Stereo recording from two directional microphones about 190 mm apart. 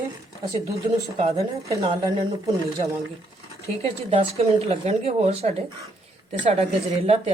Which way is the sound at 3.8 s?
30° right (ahead or behind).